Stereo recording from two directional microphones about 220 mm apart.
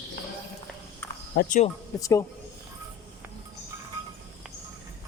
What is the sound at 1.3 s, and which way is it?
Speech, 35° left (ahead or behind).